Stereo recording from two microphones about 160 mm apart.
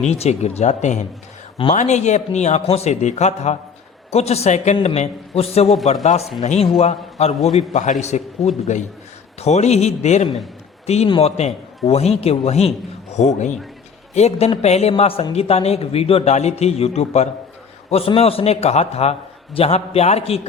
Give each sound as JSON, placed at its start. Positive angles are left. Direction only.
{"t": 0.0, "sound": "a man's voice", "side_deg": 45}